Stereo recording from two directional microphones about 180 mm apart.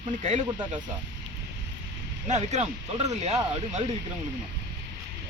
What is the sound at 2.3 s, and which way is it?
Speech, 40° right (ahead or behind).